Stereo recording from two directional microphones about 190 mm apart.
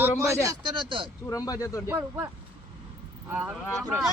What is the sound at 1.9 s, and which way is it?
Speech, 10° right (ahead or behind).